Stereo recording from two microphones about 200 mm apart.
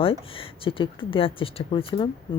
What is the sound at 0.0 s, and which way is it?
Speech, 25° left (ahead or behind).